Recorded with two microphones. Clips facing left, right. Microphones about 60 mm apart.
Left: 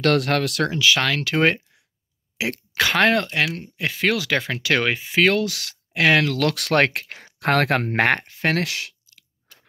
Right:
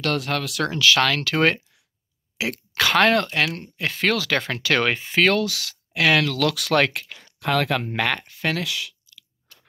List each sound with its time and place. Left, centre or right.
0.0 s speech: left
0.7 s speech: centre
2.8 s speech: centre
5.4 s speech: left
6.5 s speech: left
7.3 s speech: left